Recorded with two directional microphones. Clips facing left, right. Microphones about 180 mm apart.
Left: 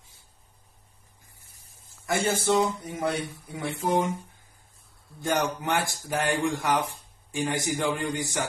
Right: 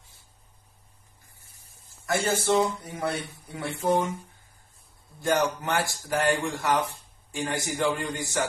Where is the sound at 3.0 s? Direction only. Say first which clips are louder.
Left 2 dB; 15° left (ahead or behind).